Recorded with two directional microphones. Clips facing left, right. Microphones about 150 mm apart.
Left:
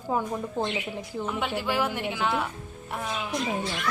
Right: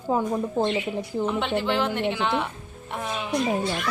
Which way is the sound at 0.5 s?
30° right (ahead or behind).